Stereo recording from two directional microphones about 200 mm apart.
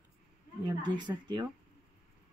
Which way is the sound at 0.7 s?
20° right (ahead or behind).